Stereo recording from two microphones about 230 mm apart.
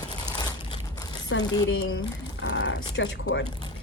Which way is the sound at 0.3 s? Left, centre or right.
Centre.